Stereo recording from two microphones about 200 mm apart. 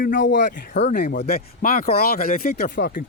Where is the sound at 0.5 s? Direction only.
45° left (ahead or behind).